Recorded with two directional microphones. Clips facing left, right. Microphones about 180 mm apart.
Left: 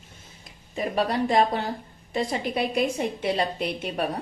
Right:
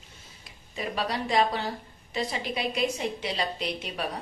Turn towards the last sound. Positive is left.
turn(degrees=55)  # may be behind; listen again after turning